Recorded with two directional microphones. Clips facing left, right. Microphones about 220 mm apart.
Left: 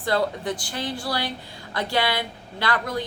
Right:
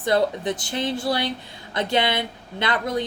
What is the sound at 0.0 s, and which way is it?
A woman's voice, 20° right (ahead or behind).